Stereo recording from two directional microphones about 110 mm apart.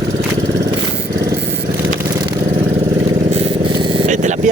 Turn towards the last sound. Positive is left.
turn(degrees=-90)